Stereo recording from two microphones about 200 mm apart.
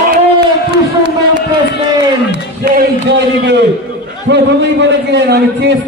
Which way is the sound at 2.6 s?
50° right (ahead or behind).